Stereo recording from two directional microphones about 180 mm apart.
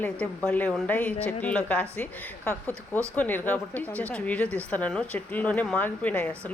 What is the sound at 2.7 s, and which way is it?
Speech, 15° right (ahead or behind).